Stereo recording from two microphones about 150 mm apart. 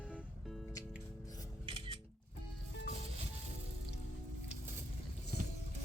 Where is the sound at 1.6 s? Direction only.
35° right (ahead or behind).